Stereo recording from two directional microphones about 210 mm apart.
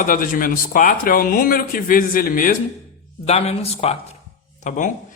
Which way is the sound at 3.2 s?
30° left (ahead or behind).